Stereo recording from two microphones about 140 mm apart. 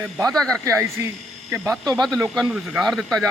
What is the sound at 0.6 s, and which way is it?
Speech, 20° right (ahead or behind).